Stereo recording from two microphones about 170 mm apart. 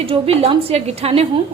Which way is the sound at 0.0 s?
35° right (ahead or behind).